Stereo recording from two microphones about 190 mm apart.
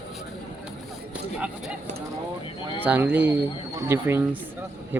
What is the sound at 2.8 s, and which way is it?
Speech, 10° right (ahead or behind).